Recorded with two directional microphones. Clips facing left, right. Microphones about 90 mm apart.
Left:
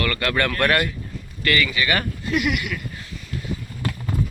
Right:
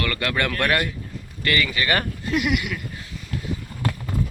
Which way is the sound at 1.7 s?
40° right (ahead or behind).